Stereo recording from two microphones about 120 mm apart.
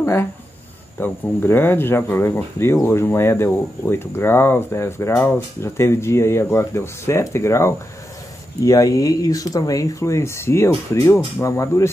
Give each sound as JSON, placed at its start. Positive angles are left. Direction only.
{"t": 0.0, "sound": "speech", "side_deg": 20}